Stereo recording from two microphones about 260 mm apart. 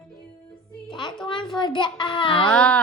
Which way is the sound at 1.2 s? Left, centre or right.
Centre.